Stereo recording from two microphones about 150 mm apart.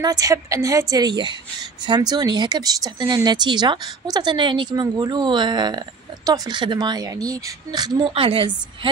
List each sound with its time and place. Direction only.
0.0 s a woman's voice: 25° right (ahead or behind)
8.1 s a woman's voice: 35° right (ahead or behind)